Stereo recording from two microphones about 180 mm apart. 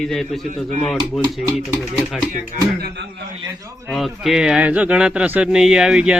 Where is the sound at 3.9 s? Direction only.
Centre (ahead or behind).